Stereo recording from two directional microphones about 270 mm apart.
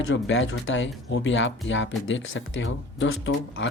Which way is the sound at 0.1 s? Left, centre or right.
Left.